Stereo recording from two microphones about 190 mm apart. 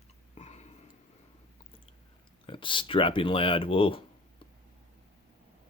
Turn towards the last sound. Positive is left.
turn(degrees=30)  # may be behind; listen again after turning